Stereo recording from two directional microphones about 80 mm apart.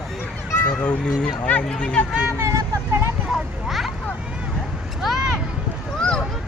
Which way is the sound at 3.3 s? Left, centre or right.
Centre.